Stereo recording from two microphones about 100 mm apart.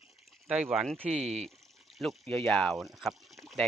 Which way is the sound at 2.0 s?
5° left (ahead or behind).